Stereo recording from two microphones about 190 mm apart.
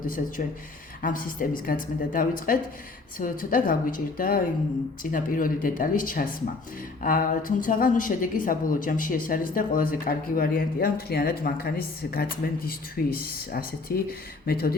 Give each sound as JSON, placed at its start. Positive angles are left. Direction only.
{"t": 0.0, "sound": "a woman's voice", "side_deg": 45}